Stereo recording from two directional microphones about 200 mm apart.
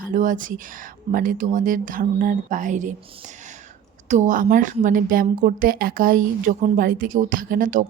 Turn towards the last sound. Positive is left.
turn(degrees=-40)  # may be behind; listen again after turning